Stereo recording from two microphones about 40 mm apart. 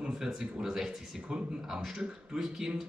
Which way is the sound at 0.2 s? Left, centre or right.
Centre.